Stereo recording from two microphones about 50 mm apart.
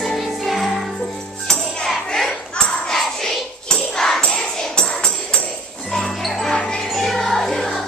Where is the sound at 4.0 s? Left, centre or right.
Centre.